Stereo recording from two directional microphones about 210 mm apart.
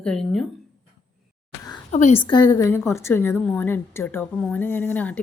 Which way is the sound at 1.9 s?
35° left (ahead or behind).